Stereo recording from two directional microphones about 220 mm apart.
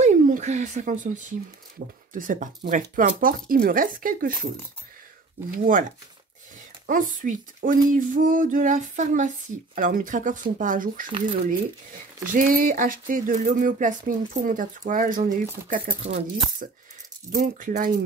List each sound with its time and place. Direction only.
0.0 s a sound: 35° right (ahead or behind)
2.1 s speech: 35° right (ahead or behind)
5.5 s speech: 35° right (ahead or behind)
6.9 s speech: 35° right (ahead or behind)
12.3 s speech: 40° right (ahead or behind)